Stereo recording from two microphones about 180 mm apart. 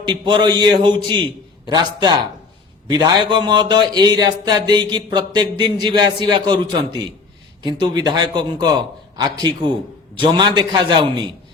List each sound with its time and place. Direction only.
0.0 s speech: 25° right (ahead or behind)